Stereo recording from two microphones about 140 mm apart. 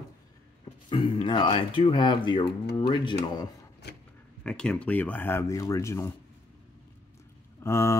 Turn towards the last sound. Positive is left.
turn(degrees=20)  # may be behind; listen again after turning